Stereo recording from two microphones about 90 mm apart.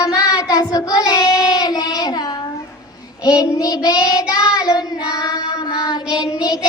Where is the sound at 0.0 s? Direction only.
40° left (ahead or behind).